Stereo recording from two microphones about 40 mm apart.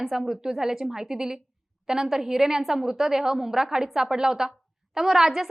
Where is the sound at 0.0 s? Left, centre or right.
Centre.